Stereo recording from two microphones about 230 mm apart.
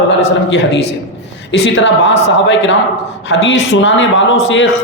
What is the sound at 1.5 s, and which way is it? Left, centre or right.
A man's voice, left.